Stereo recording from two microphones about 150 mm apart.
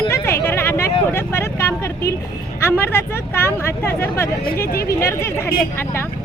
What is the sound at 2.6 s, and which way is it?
Speech, 15° left (ahead or behind).